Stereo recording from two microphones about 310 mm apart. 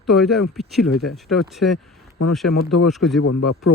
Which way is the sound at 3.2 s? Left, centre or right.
Left.